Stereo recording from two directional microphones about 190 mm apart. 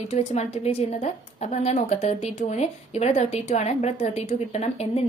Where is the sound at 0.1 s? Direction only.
35° left (ahead or behind).